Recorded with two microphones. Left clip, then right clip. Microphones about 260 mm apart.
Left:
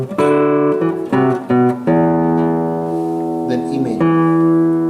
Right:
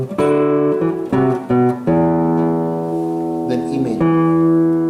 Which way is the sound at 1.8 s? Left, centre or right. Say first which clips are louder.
Left 1 dB; centre.